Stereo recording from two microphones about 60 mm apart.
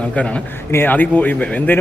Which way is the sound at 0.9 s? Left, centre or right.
Left.